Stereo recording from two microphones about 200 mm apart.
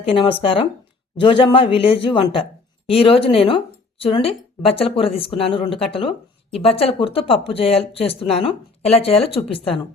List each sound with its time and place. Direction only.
0.0 s speech: 25° left (ahead or behind)